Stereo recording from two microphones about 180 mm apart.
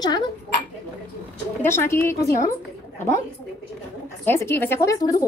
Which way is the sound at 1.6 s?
15° left (ahead or behind).